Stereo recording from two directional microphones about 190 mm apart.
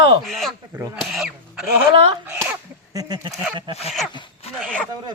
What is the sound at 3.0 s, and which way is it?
Speech, 20° right (ahead or behind).